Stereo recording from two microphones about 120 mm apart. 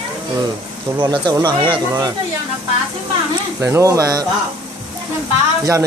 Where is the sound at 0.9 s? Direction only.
40° right (ahead or behind).